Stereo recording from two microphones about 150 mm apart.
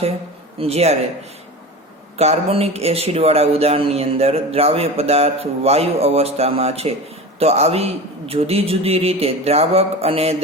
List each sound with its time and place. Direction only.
0.6 s speech: 45° right (ahead or behind)
2.1 s speech: 45° right (ahead or behind)